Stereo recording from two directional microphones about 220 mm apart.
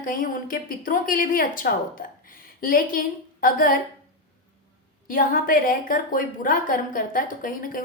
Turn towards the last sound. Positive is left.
turn(degrees=40)  # may be behind; listen again after turning